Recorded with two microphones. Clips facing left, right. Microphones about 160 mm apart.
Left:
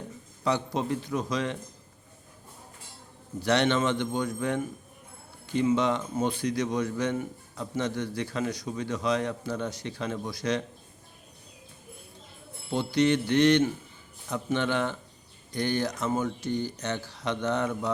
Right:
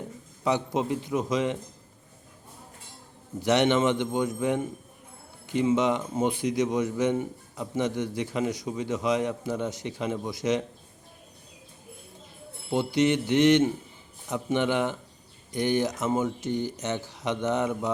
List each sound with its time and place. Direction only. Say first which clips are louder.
0.4 s a man's voice: right 2 dB; 20° right (ahead or behind)
3.4 s a man's voice: right 3 dB; 20° right (ahead or behind)
12.7 s a man's voice: right 1 dB; 20° right (ahead or behind)